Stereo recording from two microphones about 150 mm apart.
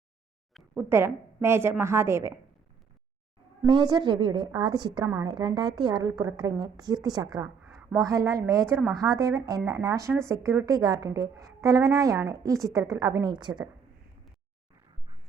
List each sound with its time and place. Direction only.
0.5 s a woman's voice: 10° right (ahead or behind)
3.7 s a woman's voice: 30° right (ahead or behind)
7.6 s a sound: 10° right (ahead or behind)
7.9 s a woman's voice: 20° right (ahead or behind)